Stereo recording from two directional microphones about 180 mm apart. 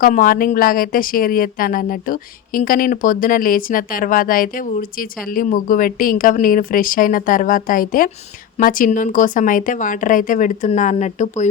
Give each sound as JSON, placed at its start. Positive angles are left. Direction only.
{"t": 0.0, "sound": "speech", "side_deg": 50}